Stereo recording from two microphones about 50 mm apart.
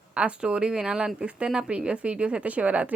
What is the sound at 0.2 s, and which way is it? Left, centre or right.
Speech, right.